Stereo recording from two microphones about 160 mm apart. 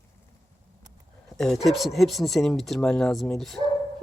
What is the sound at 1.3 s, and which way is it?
Speech, centre (ahead or behind).